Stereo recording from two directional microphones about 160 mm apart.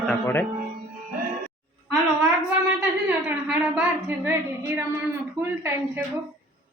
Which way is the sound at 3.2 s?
10° right (ahead or behind).